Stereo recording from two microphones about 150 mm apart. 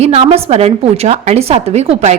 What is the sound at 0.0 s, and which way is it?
A woman's voice, 45° right (ahead or behind).